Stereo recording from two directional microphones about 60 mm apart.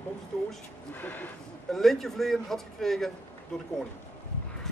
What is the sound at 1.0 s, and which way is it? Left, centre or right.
Speech, left.